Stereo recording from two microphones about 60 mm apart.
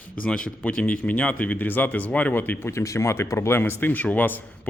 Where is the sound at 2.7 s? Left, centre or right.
Left.